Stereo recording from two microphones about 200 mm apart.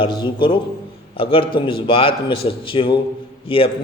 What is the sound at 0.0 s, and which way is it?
A man's voice, 25° left (ahead or behind).